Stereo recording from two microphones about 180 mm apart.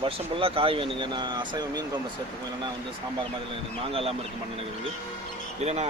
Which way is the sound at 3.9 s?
30° right (ahead or behind).